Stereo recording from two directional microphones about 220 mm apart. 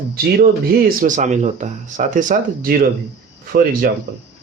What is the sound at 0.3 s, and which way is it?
Speech, 40° right (ahead or behind).